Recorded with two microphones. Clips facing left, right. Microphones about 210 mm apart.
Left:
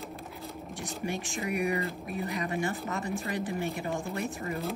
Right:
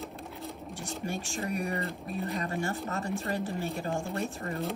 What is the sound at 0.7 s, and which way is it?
Speech, 15° left (ahead or behind).